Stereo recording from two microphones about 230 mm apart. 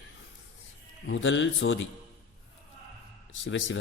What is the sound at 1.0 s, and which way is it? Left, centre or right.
Speech, left.